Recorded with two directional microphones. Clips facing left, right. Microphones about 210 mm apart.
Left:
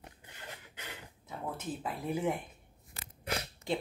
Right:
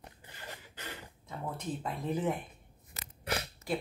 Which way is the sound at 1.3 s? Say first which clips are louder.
Right 1 dB; 5° left (ahead or behind).